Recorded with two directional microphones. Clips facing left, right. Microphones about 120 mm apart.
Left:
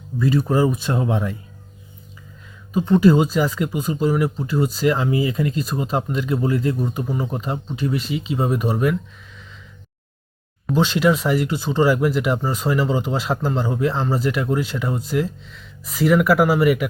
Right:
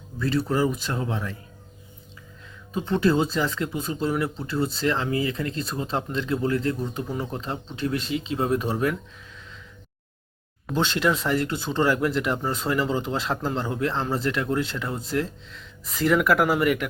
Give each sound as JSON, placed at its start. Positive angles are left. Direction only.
{"t": 0.2, "sound": "speech", "side_deg": 10}
{"t": 2.9, "sound": "speech", "side_deg": 10}
{"t": 10.7, "sound": "speech", "side_deg": 5}